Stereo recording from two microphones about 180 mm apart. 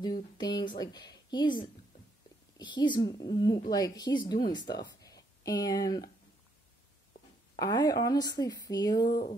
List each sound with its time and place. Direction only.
0.0 s a woman's voice: 25° left (ahead or behind)
4.8 s a sound: 20° left (ahead or behind)
7.5 s a woman's voice: 20° left (ahead or behind)